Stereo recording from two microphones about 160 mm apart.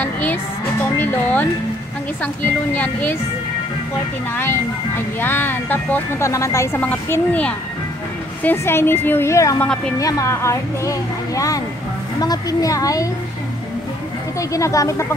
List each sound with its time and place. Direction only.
0.0 s music: 10° left (ahead or behind)
0.9 s speech: 15° left (ahead or behind)
4.4 s speech: 15° left (ahead or behind)
9.6 s speech: 5° left (ahead or behind)
9.9 s a woman's voice: 20° left (ahead or behind)
14.5 s a woman's voice: 20° left (ahead or behind)